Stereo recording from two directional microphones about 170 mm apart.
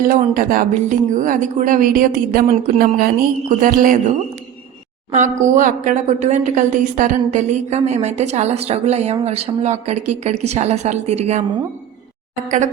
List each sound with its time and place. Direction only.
0.0 s speech: 55° right (ahead or behind)
5.1 s speech: 50° right (ahead or behind)
12.5 s speech: 45° right (ahead or behind)